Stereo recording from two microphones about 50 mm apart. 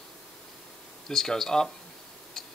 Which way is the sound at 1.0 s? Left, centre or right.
Centre.